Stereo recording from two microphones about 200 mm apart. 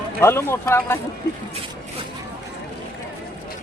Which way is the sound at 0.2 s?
10° left (ahead or behind).